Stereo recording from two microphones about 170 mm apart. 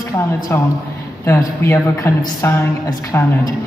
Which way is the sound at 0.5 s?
15° left (ahead or behind).